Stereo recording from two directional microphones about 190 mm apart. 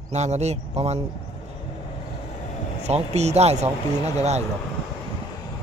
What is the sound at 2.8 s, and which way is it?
Speech, 35° right (ahead or behind).